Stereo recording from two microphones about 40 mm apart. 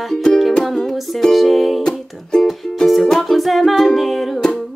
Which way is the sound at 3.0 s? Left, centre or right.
Centre.